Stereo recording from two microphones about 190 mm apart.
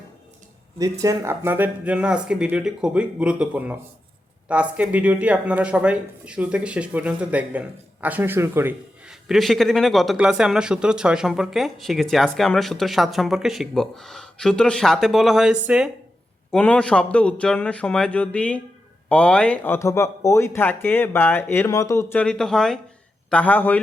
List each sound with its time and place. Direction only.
0.8 s speech: 15° right (ahead or behind)
9.2 s speech: centre (ahead or behind)